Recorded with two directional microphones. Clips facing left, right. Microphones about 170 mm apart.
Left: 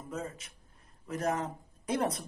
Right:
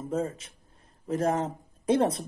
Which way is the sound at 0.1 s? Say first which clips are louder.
Right 9 dB; 30° right (ahead or behind).